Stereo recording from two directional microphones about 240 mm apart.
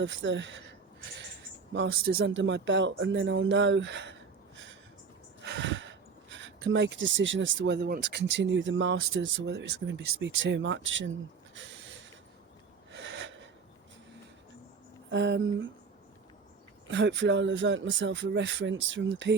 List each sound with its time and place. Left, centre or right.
0.0 s speech: right
1.7 s speech: right
5.4 s speech: right
11.5 s a sound: right
13.0 s snort: right
15.1 s speech: right
16.9 s speech: right